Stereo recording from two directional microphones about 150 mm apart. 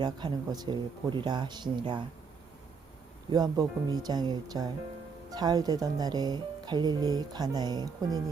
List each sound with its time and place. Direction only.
0.0 s speech: 30° right (ahead or behind)
3.3 s speech: 25° right (ahead or behind)